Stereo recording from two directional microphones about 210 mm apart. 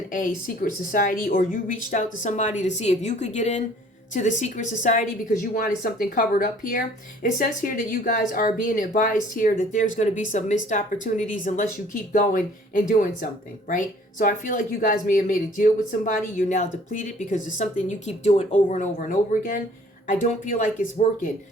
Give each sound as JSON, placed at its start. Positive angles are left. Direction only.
{"t": 0.1, "sound": "a woman's voice", "side_deg": 40}